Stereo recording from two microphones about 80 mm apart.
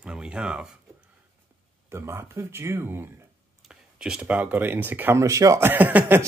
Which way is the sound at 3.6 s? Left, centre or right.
Centre.